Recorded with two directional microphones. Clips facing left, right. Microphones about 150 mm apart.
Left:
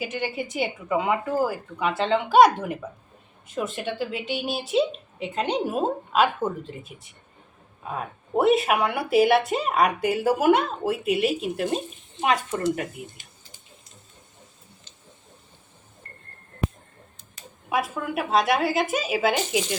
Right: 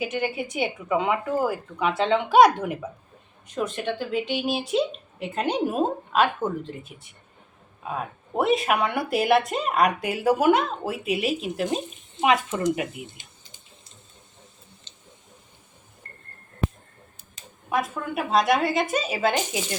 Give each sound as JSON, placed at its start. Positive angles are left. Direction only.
{"t": 0.0, "sound": "speech", "side_deg": 0}
{"t": 7.9, "sound": "speech", "side_deg": 0}
{"t": 12.5, "sound": "speech", "side_deg": -15}
{"t": 13.1, "sound": "a sound", "side_deg": -20}
{"t": 14.9, "sound": "a sound", "side_deg": -25}
{"t": 17.7, "sound": "speech", "side_deg": 5}